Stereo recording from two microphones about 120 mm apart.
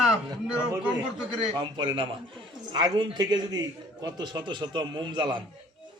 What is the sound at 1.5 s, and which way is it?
A man's voice, 40° right (ahead or behind).